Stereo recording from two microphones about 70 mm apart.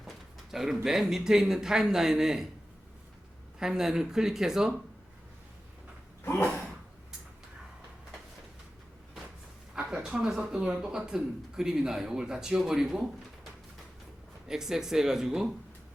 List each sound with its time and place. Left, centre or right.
0.5 s speech: centre
3.6 s speech: centre
6.2 s gasp: left
9.7 s speech: centre